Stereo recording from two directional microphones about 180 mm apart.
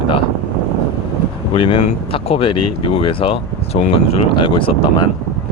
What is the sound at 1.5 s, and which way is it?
Speech, 30° left (ahead or behind).